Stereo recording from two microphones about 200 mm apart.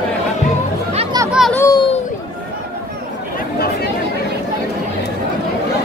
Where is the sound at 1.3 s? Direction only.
Centre (ahead or behind).